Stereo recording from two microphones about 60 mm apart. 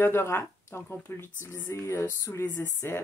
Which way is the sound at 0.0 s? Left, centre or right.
Left.